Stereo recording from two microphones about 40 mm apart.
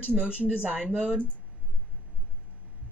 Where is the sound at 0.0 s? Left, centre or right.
Right.